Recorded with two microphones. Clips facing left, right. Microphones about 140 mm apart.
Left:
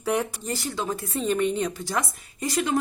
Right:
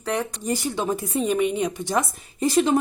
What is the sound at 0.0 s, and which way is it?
Speech, 10° left (ahead or behind).